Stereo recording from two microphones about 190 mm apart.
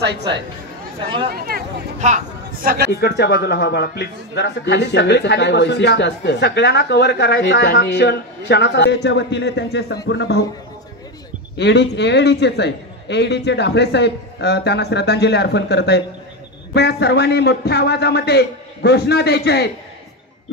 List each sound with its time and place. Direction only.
0.0 s speech: 60° right (ahead or behind)
1.3 s speech: 55° right (ahead or behind)
2.0 s speech: 40° right (ahead or behind)
2.9 s a man's voice: 60° left (ahead or behind)
11.5 s a man's voice: 65° left (ahead or behind)